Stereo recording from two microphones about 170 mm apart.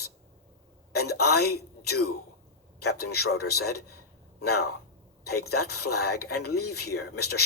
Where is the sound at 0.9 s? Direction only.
70° left (ahead or behind).